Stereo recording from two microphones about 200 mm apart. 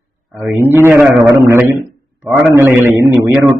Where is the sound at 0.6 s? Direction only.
10° right (ahead or behind).